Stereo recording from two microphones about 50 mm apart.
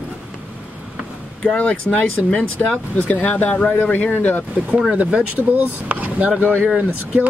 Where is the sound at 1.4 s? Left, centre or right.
Left.